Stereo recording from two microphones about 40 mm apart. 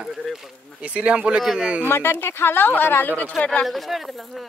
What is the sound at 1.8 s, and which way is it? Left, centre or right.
Speech, left.